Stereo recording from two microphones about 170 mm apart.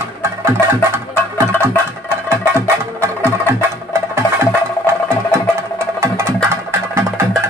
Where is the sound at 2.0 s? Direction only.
15° right (ahead or behind).